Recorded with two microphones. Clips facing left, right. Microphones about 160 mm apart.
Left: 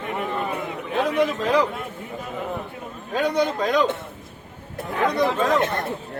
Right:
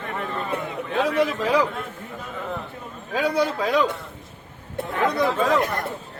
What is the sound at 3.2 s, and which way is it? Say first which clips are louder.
Speech: left 1 dB; 5° right (ahead or behind).